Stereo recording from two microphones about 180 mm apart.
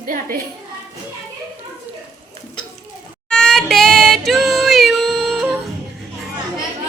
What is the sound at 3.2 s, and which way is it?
Female singing, 5° left (ahead or behind).